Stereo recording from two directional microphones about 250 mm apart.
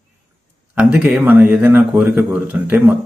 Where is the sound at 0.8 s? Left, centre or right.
Centre.